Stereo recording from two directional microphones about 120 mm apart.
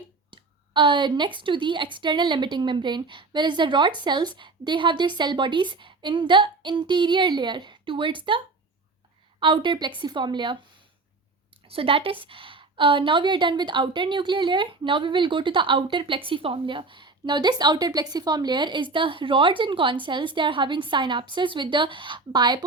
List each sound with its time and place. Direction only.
0.3 s a woman's voice: 45° right (ahead or behind)
9.4 s a woman's voice: 45° right (ahead or behind)
11.7 s a woman's voice: 50° right (ahead or behind)